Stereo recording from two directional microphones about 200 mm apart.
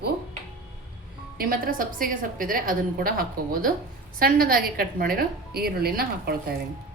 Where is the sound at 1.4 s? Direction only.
45° right (ahead or behind).